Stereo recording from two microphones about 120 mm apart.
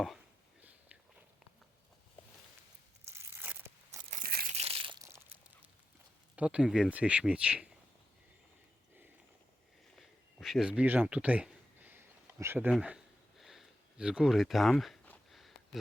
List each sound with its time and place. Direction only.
3.1 s crushing: 20° right (ahead or behind)
4.1 s crushing: 60° right (ahead or behind)
6.3 s speech: 10° right (ahead or behind)
9.9 s a sound: centre (ahead or behind); by 12.7 s 20° right (ahead or behind)
13.4 s speech: 5° right (ahead or behind)
15.3 s a sound: centre (ahead or behind)